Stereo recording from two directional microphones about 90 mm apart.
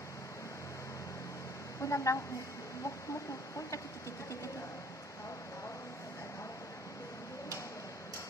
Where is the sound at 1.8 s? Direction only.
35° left (ahead or behind).